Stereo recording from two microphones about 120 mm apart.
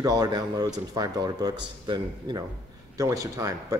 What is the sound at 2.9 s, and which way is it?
Speech, 25° right (ahead or behind).